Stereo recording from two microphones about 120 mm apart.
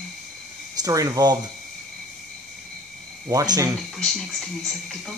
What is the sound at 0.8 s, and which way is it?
Speech, 30° right (ahead or behind).